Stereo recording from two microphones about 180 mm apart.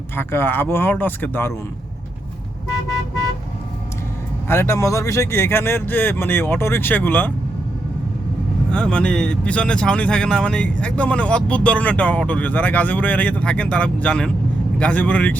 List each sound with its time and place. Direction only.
0.2 s speech: 10° left (ahead or behind)
4.4 s speech: 15° left (ahead or behind)
8.7 s speech: 5° left (ahead or behind)